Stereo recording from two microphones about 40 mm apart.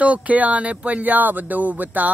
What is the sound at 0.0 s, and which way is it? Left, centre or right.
Speech, right.